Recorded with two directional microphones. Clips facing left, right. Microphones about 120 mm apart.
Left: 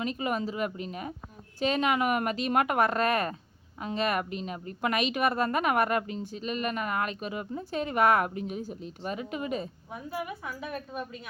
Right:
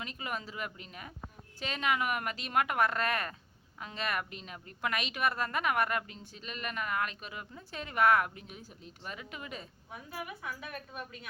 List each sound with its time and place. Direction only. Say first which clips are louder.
0.0 s a woman's voice: left 10 dB; 25° left (ahead or behind)